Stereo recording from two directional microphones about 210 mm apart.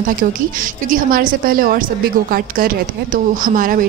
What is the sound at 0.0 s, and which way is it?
A woman's voice, 40° right (ahead or behind).